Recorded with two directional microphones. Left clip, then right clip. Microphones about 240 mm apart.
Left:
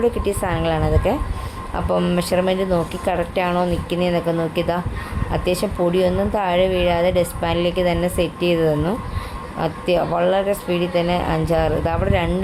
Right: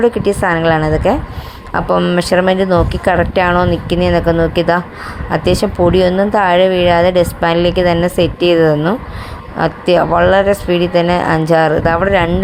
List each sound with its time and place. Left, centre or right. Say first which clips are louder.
0.0 s speech: right 8 dB; right